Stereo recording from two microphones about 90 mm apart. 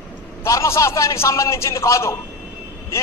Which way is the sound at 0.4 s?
35° left (ahead or behind).